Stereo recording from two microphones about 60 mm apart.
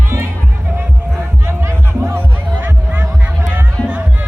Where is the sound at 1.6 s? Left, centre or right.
Right.